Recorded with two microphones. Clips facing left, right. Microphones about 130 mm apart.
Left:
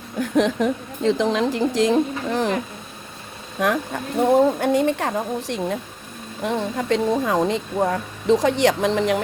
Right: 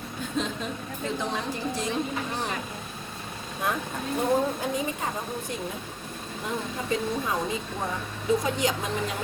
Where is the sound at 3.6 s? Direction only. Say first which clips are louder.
Left 8 dB; 90° left.